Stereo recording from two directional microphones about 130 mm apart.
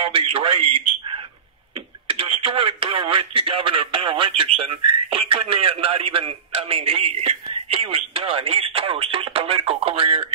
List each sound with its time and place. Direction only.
0.0 s a man's voice: 45° right (ahead or behind)